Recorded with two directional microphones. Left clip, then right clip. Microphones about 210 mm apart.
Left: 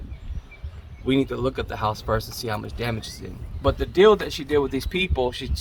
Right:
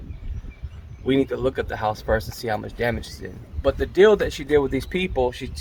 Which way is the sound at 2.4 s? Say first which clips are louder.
Right 4 dB; 35° left (ahead or behind).